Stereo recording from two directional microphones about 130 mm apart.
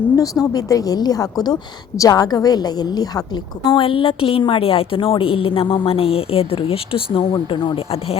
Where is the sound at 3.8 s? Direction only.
45° left (ahead or behind).